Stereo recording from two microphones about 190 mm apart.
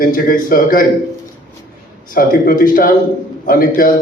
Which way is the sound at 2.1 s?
45° left (ahead or behind).